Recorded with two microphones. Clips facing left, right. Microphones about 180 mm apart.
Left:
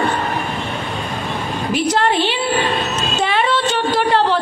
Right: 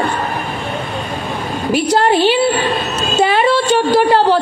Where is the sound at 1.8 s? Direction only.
30° right (ahead or behind).